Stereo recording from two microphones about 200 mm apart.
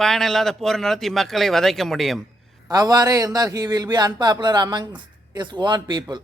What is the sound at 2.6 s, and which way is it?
Speech, 20° right (ahead or behind).